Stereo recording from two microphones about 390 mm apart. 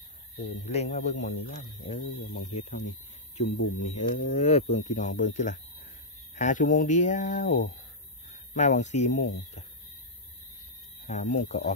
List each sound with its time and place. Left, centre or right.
0.7 s a man's voice: centre
11.1 s a man's voice: centre